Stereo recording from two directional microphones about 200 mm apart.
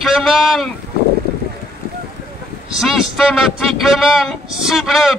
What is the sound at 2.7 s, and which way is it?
Speech, centre (ahead or behind).